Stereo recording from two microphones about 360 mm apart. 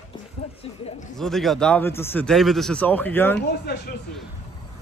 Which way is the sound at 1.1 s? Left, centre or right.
Centre.